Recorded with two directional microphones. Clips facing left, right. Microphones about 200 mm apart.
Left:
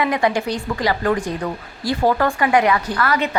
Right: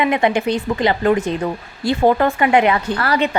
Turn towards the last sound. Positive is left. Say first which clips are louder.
# right 2 dB
turn(degrees=-30)  # may be behind; listen again after turning